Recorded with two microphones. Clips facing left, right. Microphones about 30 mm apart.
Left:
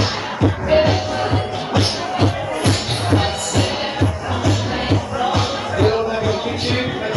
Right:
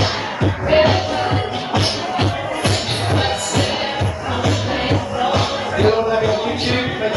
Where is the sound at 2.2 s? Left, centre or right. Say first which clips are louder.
Left 2 dB; centre.